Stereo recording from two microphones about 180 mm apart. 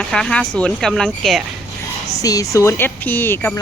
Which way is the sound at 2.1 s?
20° left (ahead or behind).